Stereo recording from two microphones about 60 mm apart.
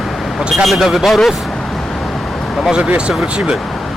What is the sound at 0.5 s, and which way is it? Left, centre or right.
Speech, centre.